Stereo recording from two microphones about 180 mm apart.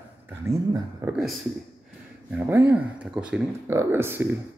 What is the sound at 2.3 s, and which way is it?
Speech, 10° right (ahead or behind).